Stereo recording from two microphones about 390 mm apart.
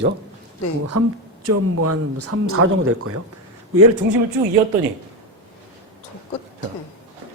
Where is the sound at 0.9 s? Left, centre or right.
Right.